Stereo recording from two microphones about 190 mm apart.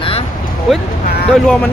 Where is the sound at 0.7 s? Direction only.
Centre (ahead or behind).